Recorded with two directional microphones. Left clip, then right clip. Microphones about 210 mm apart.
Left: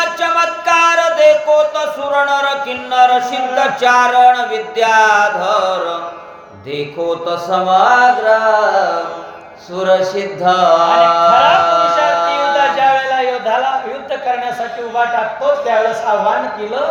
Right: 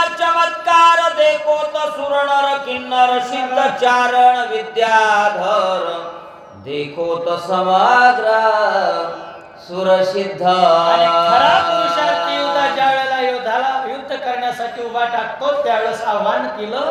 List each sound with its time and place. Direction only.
0.2 s music: 10° left (ahead or behind)
2.9 s speech: 10° left (ahead or behind)
7.3 s speech: 10° left (ahead or behind)
9.7 s a sound: 10° left (ahead or behind)
12.7 s a sound: 15° right (ahead or behind)
15.6 s a man's voice: 20° right (ahead or behind)